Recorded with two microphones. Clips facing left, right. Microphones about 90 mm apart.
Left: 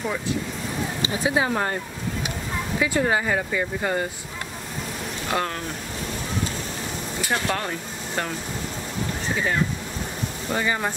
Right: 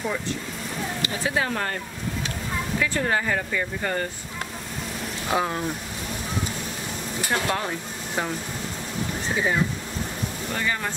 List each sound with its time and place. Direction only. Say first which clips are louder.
1.0 s speech: left 4 dB; 20° left (ahead or behind)
2.8 s speech: left 3 dB; 15° left (ahead or behind)
5.3 s speech: right 1 dB; 10° right (ahead or behind)
7.4 s speech: even; centre (ahead or behind)
10.5 s speech: left 4 dB; 15° left (ahead or behind)